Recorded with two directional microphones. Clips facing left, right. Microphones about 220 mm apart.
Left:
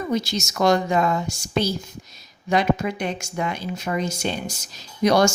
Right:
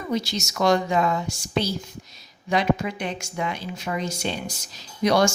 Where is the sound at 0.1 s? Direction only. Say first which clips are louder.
Right 1 dB; 45° left (ahead or behind).